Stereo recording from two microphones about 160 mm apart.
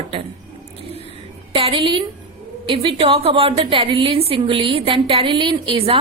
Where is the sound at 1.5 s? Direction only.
35° right (ahead or behind).